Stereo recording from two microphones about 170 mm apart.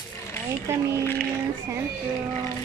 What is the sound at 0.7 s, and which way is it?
Speech, 15° right (ahead or behind).